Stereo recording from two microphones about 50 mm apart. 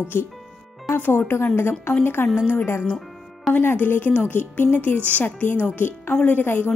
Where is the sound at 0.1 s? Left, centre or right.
Left.